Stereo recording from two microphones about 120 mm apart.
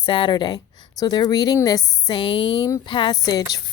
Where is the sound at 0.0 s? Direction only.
40° left (ahead or behind).